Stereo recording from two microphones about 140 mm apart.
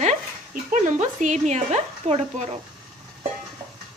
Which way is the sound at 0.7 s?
60° right (ahead or behind).